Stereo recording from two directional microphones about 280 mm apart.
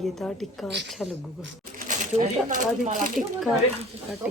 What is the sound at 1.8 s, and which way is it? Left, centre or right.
Speech, right.